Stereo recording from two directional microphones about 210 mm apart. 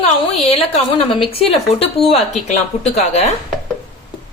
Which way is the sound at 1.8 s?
25° left (ahead or behind).